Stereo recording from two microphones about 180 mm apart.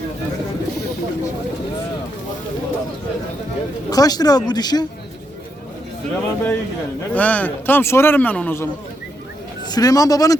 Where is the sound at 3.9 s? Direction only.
20° left (ahead or behind).